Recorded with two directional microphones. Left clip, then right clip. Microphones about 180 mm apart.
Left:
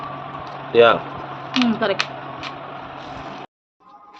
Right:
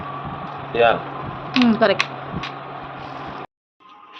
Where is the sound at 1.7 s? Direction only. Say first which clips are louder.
Right 8 dB; 20° right (ahead or behind).